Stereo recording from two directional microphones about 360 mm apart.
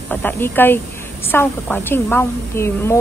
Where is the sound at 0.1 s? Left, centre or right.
Centre.